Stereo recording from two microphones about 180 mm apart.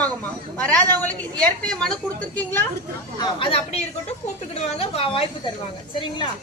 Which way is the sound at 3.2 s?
30° left (ahead or behind).